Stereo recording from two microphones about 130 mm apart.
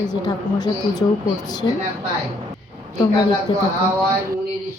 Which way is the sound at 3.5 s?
35° left (ahead or behind).